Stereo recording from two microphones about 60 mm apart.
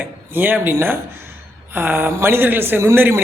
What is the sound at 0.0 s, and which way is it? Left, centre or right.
A man's voice, right.